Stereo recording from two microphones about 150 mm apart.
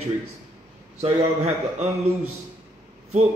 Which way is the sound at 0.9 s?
50° right (ahead or behind).